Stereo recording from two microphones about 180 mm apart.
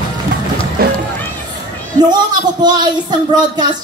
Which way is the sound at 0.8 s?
55° right (ahead or behind).